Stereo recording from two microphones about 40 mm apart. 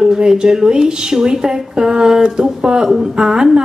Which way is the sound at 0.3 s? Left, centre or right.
Centre.